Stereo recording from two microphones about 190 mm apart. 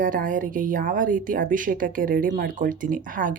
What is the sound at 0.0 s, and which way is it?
A woman's voice, 45° right (ahead or behind).